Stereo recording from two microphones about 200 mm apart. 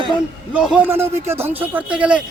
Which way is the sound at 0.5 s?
5° right (ahead or behind).